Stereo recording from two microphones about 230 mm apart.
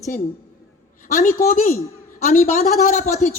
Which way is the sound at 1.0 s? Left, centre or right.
Left.